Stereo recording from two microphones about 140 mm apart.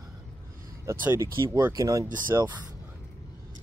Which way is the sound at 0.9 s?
15° right (ahead or behind).